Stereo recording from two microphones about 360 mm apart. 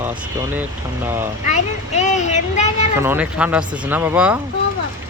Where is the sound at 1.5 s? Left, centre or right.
Centre.